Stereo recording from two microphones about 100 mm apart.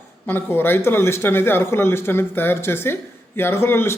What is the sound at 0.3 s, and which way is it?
Speech, 20° left (ahead or behind).